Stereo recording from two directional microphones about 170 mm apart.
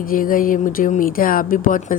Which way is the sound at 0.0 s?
55° left (ahead or behind).